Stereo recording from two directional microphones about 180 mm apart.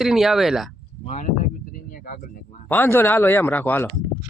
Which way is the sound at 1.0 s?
40° left (ahead or behind).